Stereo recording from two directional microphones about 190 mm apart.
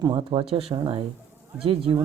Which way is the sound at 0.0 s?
25° right (ahead or behind).